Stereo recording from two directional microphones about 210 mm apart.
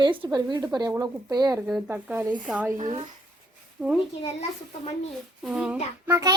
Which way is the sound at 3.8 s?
Centre (ahead or behind).